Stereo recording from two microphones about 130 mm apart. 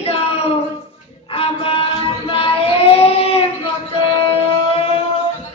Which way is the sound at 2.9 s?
50° left (ahead or behind).